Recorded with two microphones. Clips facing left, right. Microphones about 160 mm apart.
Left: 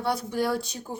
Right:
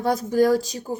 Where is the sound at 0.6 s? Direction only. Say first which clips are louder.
Right 5 dB; 90° right.